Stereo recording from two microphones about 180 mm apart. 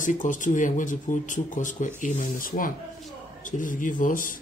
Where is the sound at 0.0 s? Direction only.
45° left (ahead or behind).